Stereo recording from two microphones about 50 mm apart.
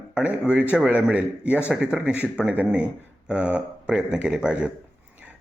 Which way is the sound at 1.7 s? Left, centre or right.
Centre.